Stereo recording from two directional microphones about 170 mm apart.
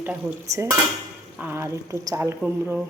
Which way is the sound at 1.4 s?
15° right (ahead or behind).